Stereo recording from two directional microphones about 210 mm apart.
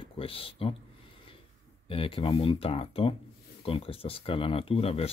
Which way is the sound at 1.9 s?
25° left (ahead or behind).